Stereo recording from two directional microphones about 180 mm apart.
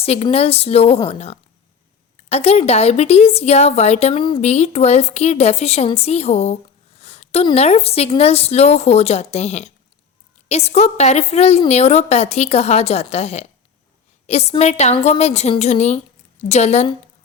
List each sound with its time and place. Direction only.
0.0 s a woman's voice: 35° left (ahead or behind)
7.0 s a sound: 35° left (ahead or behind)
7.4 s a woman's voice: 35° left (ahead or behind)